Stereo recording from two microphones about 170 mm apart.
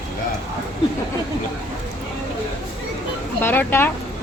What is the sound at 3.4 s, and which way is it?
Speech, 10° left (ahead or behind).